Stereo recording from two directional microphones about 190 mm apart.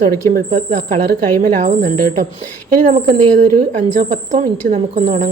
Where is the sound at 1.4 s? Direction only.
40° right (ahead or behind).